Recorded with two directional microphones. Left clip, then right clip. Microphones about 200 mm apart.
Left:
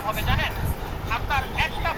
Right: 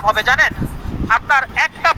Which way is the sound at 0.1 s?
50° right (ahead or behind).